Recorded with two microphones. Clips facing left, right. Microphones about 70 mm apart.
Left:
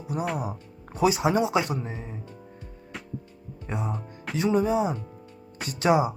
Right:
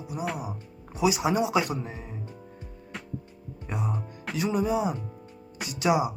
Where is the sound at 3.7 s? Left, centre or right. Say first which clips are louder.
Left 1 dB; left.